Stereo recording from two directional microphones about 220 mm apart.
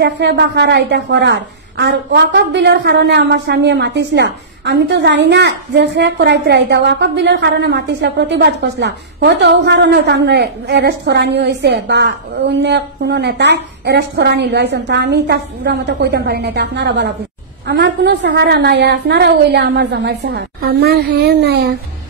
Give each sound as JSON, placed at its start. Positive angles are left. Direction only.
{"t": 0.0, "sound": "a woman's voice", "side_deg": -50}